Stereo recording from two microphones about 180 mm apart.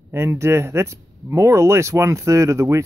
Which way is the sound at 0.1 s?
15° right (ahead or behind).